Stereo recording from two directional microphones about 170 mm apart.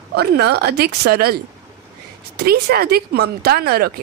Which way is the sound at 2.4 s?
70° right (ahead or behind).